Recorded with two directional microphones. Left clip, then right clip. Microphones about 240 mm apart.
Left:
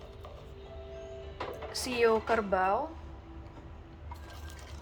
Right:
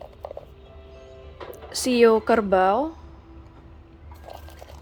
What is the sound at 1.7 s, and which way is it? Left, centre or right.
A woman's voice, right.